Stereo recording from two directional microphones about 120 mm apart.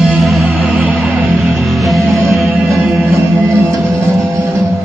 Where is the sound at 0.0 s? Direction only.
Centre (ahead or behind).